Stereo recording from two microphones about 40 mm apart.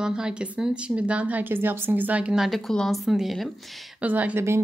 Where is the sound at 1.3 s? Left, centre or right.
Right.